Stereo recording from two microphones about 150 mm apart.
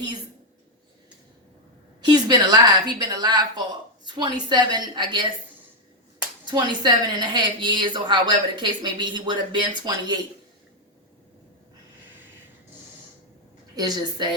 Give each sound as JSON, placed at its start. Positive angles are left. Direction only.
{"t": 2.0, "sound": "a woman's voice", "side_deg": -25}
{"t": 6.4, "sound": "a woman's voice", "side_deg": -30}
{"t": 13.7, "sound": "a woman's voice", "side_deg": -25}